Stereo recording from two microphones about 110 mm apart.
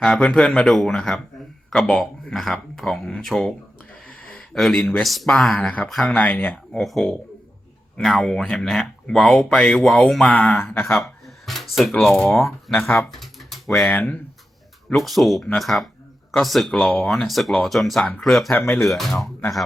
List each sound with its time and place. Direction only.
0.0 s speech: 5° left (ahead or behind)
4.5 s speech: 5° left (ahead or behind)
5.5 s speech: 15° left (ahead or behind)
10.6 s speech: 20° left (ahead or behind)
11.4 s speech: centre (ahead or behind)
13.1 s typing: centre (ahead or behind)
13.9 s speech: 15° left (ahead or behind)
14.8 s speech: centre (ahead or behind)